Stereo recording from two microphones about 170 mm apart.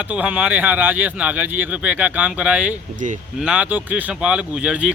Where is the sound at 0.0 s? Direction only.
10° right (ahead or behind).